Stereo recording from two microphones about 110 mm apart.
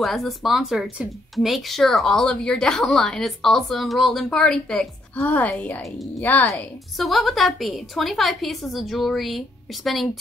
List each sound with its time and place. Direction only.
0.0 s a woman's voice: centre (ahead or behind); by 6.4 s 15° left (ahead or behind)
7.0 s speech: centre (ahead or behind)